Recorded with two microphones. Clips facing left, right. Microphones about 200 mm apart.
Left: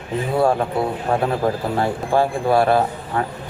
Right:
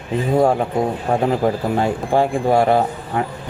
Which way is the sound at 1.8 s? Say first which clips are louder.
Even; 20° right (ahead or behind).